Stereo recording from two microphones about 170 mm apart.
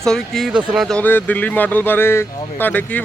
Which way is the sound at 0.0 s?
Centre (ahead or behind).